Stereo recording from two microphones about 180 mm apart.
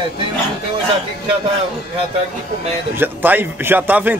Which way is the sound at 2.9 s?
10° right (ahead or behind).